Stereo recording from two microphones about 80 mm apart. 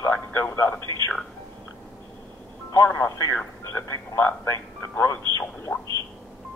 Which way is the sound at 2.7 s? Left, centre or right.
Left.